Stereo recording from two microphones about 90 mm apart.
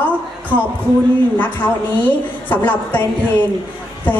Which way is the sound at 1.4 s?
20° left (ahead or behind).